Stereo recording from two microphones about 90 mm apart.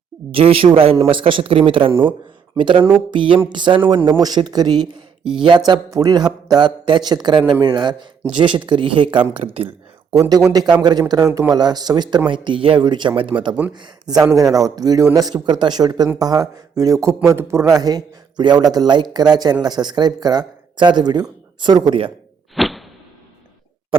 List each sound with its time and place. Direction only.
0.3 s speech: 90° right
2.6 s a sound: 65° right (ahead or behind)
3.5 s speech: 60° right (ahead or behind)
5.9 s speech: 40° right (ahead or behind); by 9.2 s 65° right (ahead or behind)
10.1 s a man's voice: 45° right (ahead or behind)
11.5 s speech: 50° right (ahead or behind)
12.3 s speech: 70° right (ahead or behind)
13.7 s a man's voice: 55° right (ahead or behind); by 17.7 s 30° right (ahead or behind)
17.7 s speech: 45° right (ahead or behind)
22.5 s a sound: centre (ahead or behind)